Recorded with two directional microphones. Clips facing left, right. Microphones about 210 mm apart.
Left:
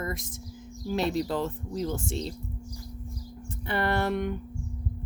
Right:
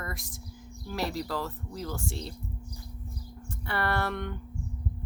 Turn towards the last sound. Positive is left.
turn(degrees=20)  # may be behind; listen again after turning